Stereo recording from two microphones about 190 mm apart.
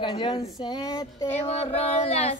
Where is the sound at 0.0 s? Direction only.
25° left (ahead or behind).